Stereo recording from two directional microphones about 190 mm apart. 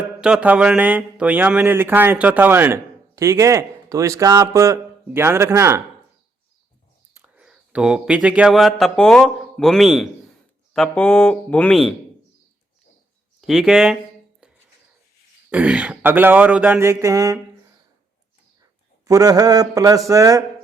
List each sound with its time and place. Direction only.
0.2 s speech: 5° right (ahead or behind)
7.1 s speech: 5° right (ahead or behind)
13.4 s speech: centre (ahead or behind)
14.4 s a sound: 5° right (ahead or behind)
15.4 s speech: 5° right (ahead or behind)
19.0 s speech: 20° right (ahead or behind)